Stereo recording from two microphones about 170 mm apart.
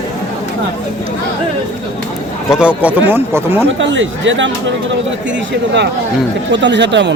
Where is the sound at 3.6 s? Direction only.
90° right.